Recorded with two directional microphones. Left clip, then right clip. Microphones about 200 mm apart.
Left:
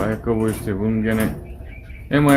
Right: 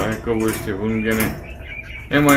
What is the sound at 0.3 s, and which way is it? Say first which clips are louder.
Speech: right 1 dB; 50° left (ahead or behind).